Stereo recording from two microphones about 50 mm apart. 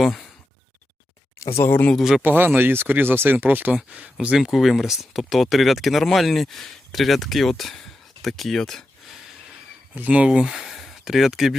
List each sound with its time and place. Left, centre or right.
0.0 s a sound: centre
1.6 s speech: left
2.2 s speech: right
3.9 s speech: right
4.4 s speech: centre
9.9 s speech: right; by 11.5 s centre